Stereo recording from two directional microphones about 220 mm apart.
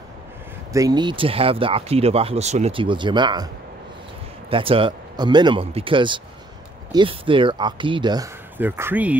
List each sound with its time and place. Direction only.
0.7 s speech: 20° right (ahead or behind)
4.5 s speech: 25° right (ahead or behind); by 9.1 s 10° right (ahead or behind)